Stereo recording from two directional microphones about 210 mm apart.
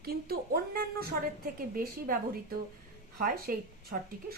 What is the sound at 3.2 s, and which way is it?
Speech, 45° right (ahead or behind).